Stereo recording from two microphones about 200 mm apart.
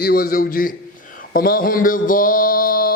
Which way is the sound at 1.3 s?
45° left (ahead or behind).